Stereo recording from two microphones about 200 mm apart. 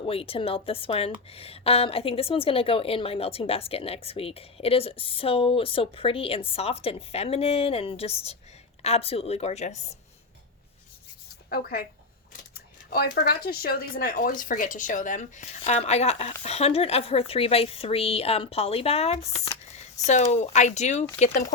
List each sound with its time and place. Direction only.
0.0 s a woman's voice: 30° left (ahead or behind)
11.4 s speech: 50° left (ahead or behind)
12.9 s speech: 50° left (ahead or behind); by 21.4 s 35° left (ahead or behind)